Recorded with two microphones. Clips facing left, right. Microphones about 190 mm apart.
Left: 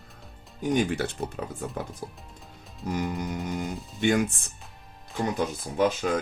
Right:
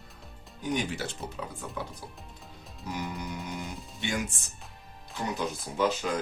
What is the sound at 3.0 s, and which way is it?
Speech, 55° left (ahead or behind).